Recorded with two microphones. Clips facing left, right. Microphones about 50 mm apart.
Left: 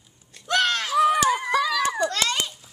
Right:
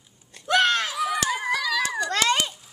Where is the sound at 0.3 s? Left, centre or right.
Centre.